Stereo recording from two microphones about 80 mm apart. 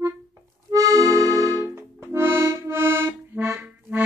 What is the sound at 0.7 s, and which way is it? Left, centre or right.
Accordion, right.